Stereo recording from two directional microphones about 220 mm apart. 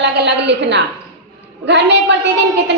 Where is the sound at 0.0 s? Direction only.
55° right (ahead or behind).